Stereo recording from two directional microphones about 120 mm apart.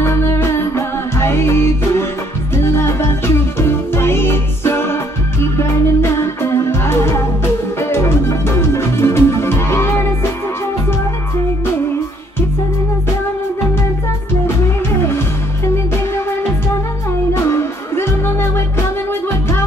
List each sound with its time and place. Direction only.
0.0 s music: 20° left (ahead or behind)
15.0 s music: 20° left (ahead or behind)
17.3 s music: 20° left (ahead or behind)